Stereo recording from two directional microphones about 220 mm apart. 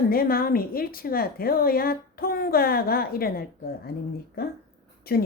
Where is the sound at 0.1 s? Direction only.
40° left (ahead or behind).